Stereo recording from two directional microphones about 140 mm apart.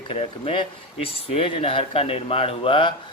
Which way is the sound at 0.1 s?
45° left (ahead or behind).